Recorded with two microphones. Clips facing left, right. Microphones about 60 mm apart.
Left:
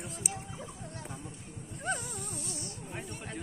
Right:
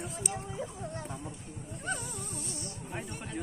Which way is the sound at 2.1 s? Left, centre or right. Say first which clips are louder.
Even; right.